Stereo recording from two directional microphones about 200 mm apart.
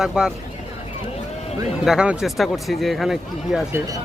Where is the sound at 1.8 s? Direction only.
5° right (ahead or behind).